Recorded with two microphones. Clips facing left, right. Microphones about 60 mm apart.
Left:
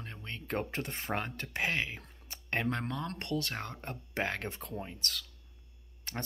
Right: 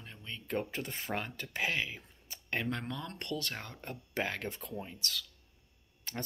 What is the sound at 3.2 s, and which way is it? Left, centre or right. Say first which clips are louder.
Speech: left 3 dB; left.